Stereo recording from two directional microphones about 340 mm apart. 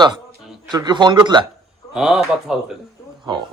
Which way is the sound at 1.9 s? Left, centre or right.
Centre.